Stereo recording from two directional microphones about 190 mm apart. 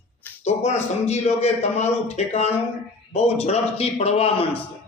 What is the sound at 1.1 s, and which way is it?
A man's voice, 35° left (ahead or behind).